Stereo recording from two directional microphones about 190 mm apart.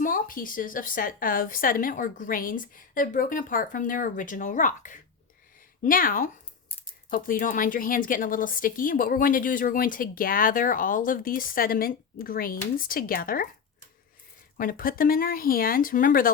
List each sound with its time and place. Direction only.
0.0 s a woman's voice: 45° left (ahead or behind)
14.6 s a woman's voice: 50° left (ahead or behind)